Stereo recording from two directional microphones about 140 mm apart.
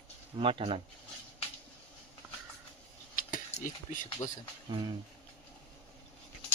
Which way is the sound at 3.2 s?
85° left.